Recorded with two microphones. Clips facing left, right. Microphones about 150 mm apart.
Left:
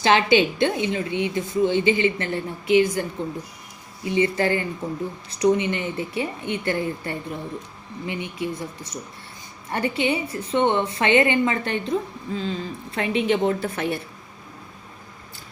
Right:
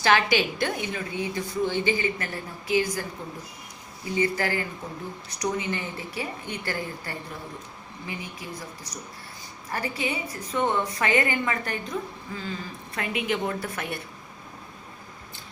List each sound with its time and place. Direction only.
0.0 s a woman's voice: 20° left (ahead or behind)
4.1 s a woman's voice: 25° left (ahead or behind)